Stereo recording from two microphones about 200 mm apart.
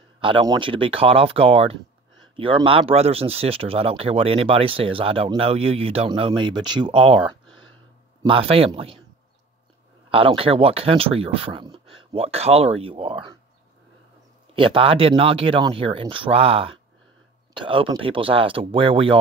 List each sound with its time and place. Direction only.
0.2 s speech: 25° right (ahead or behind)
10.0 s speech: 25° right (ahead or behind)
14.5 s speech: 25° right (ahead or behind)